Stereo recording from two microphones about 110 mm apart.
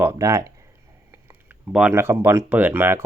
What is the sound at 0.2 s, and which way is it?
Speech, 30° right (ahead or behind).